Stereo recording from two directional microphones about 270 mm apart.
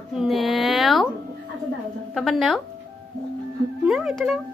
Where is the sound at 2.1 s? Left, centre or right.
Centre.